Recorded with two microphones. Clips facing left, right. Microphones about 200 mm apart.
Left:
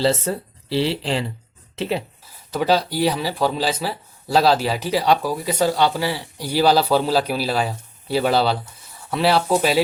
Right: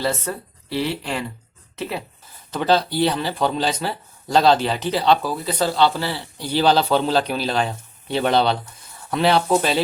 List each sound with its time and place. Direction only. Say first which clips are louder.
0.0 s speech: left 4 dB; 25° left (ahead or behind)
2.5 s speech: even; 10° left (ahead or behind)